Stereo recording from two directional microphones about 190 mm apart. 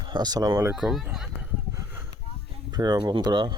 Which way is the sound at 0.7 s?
Centre (ahead or behind).